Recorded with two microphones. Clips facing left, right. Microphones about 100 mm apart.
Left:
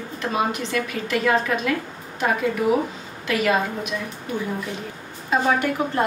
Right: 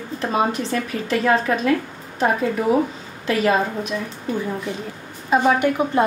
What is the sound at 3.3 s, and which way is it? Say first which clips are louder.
Speech: right 2 dB; 35° right (ahead or behind).